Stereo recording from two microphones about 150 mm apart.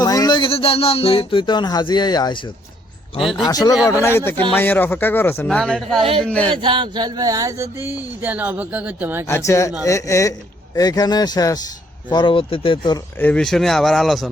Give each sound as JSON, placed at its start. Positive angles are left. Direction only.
{"t": 0.0, "sound": "speech", "side_deg": 25}
{"t": 3.2, "sound": "speech", "side_deg": 0}
{"t": 3.4, "sound": "a man's voice", "side_deg": 25}
{"t": 5.5, "sound": "speech", "side_deg": 5}
{"t": 6.0, "sound": "speech", "side_deg": -40}
{"t": 6.2, "sound": "a man's voice", "side_deg": 10}
{"t": 6.6, "sound": "a sound", "side_deg": -35}
{"t": 9.2, "sound": "speech", "side_deg": 20}
{"t": 13.1, "sound": "speech", "side_deg": 10}